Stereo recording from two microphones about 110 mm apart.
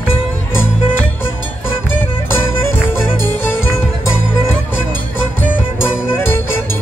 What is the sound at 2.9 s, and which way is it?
Music, 20° left (ahead or behind).